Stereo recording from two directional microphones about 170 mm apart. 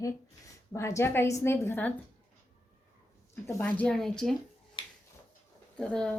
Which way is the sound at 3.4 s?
10° left (ahead or behind).